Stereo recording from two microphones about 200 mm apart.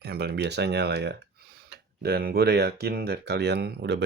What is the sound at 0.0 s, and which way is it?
Speech, 50° right (ahead or behind).